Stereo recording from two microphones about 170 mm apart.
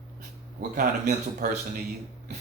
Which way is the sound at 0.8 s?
55° right (ahead or behind).